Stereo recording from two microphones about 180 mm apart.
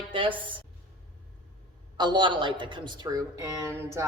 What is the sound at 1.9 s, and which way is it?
A woman's voice, 25° right (ahead or behind).